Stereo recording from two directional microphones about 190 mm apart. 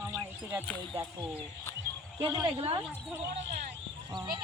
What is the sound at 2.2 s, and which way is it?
Speech, 20° right (ahead or behind).